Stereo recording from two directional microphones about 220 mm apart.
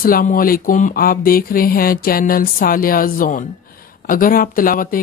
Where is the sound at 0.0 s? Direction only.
40° left (ahead or behind).